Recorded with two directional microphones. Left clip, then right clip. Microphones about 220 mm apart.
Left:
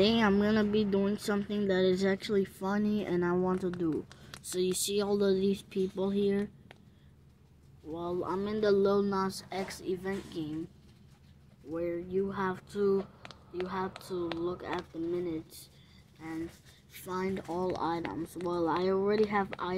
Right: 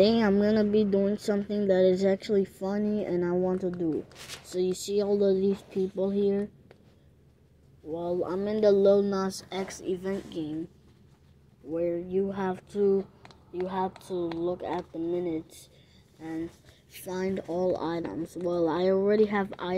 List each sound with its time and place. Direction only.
0.0 s speech: centre (ahead or behind)
7.9 s speech: centre (ahead or behind)
9.3 s speech: 10° right (ahead or behind)
9.7 s speech: centre (ahead or behind)
11.7 s speech: 5° right (ahead or behind)
12.9 s a sound: 20° left (ahead or behind)
13.8 s speech: 25° left (ahead or behind)
15.1 s speech: 5° right (ahead or behind)
16.9 s speech: 5° right (ahead or behind)